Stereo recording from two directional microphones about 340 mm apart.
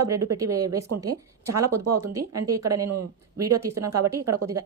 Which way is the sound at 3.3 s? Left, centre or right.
Centre.